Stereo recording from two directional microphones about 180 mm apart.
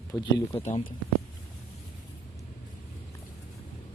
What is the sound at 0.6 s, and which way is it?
Speech, 40° left (ahead or behind).